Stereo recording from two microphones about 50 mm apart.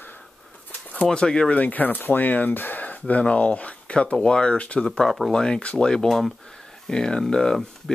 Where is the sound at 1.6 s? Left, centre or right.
Left.